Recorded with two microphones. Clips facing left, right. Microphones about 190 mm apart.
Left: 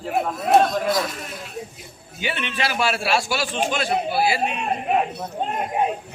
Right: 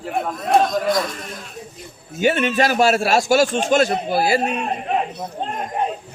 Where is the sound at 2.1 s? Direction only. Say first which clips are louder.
Right 11 dB; 45° right (ahead or behind).